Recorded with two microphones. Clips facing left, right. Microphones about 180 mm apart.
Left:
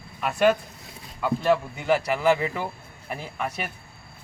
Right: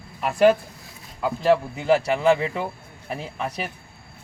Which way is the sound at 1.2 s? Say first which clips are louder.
Right 2 dB; 30° right (ahead or behind).